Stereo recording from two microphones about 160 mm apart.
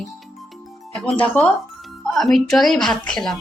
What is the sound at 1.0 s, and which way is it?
Speech, 5° left (ahead or behind).